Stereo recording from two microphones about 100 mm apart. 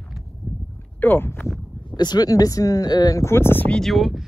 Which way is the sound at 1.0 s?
20° left (ahead or behind).